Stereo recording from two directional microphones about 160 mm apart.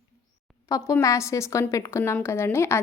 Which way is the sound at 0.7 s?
20° left (ahead or behind).